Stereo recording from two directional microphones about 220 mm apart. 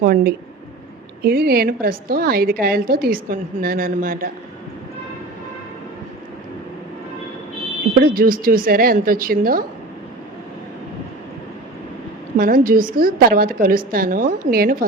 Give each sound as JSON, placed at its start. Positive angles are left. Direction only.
{"t": 0.0, "sound": "a woman's voice", "side_deg": -40}
{"t": 7.9, "sound": "a woman's voice", "side_deg": -40}
{"t": 12.4, "sound": "a woman's voice", "side_deg": -40}